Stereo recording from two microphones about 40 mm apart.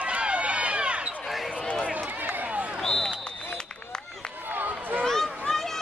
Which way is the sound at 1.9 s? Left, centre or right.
Right.